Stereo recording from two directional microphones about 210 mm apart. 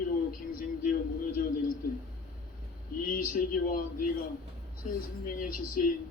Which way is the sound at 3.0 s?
45° left (ahead or behind).